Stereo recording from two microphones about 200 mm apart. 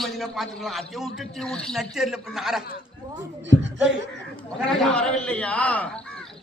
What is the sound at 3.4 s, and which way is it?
Speech, 65° right (ahead or behind).